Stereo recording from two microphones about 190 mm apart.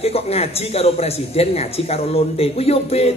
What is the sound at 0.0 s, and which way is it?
A man's voice, 30° left (ahead or behind).